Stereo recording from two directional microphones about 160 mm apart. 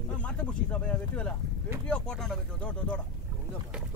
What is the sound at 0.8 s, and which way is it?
Speech, 10° left (ahead or behind).